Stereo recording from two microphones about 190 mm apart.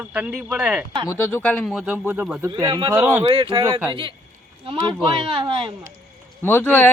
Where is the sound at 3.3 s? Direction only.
30° right (ahead or behind).